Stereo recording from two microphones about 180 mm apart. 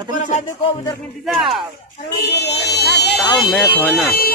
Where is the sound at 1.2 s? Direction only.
Centre (ahead or behind).